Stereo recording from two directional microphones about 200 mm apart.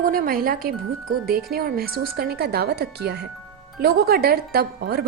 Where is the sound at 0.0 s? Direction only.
45° right (ahead or behind).